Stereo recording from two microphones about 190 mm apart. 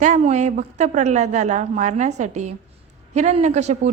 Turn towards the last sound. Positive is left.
turn(degrees=-35)  # may be behind; listen again after turning